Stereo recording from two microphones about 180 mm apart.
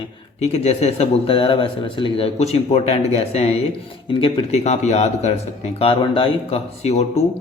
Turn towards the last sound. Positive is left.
turn(degrees=35)  # may be behind; listen again after turning